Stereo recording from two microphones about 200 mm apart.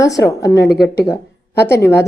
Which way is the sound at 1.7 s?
10° left (ahead or behind).